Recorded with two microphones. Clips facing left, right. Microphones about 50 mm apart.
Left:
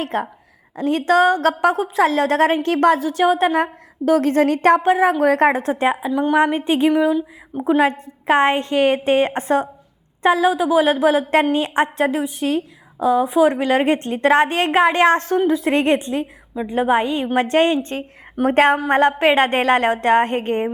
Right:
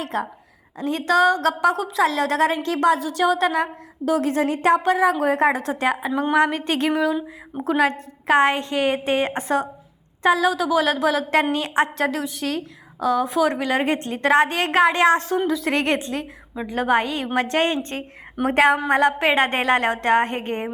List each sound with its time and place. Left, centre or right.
0.0 s a woman's voice: left
4.8 s a woman's voice: left
5.2 s a woman's voice: left
5.5 s a woman's voice: left; by 6.9 s centre
7.1 s speech: centre
7.8 s a woman's voice: left
13.7 s a woman's voice: left